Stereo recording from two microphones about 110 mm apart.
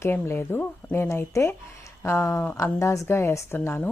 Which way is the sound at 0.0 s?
20° left (ahead or behind).